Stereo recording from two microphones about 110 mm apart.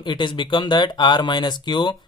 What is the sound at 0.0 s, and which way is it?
Speech, 45° left (ahead or behind).